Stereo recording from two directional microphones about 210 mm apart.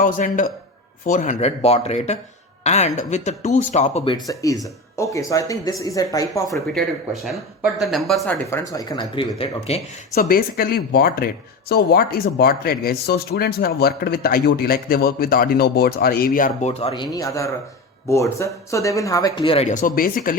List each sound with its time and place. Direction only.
0.0 s speech: 40° left (ahead or behind); by 6.6 s 15° left (ahead or behind)
6.7 s speech: centre (ahead or behind)
8.4 s speech: 15° left (ahead or behind)
10.2 s speech: 45° left (ahead or behind)
16.9 s speech: 20° left (ahead or behind); by 20.3 s 40° left (ahead or behind)